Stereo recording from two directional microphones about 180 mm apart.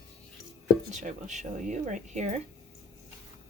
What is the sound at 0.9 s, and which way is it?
Speech, 40° right (ahead or behind).